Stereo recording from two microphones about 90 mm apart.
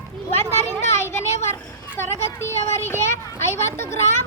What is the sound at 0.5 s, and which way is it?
Child singing, 30° left (ahead or behind).